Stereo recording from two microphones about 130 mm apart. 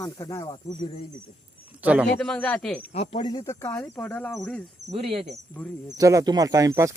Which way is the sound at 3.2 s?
30° left (ahead or behind).